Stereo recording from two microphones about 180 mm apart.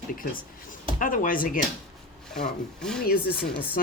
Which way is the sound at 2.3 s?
5° left (ahead or behind).